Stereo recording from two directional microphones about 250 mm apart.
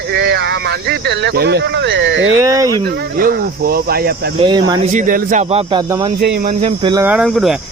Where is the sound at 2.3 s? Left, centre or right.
Centre.